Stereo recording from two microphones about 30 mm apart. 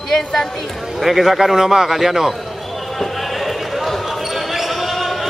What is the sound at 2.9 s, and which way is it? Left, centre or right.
Basketball bounce, centre.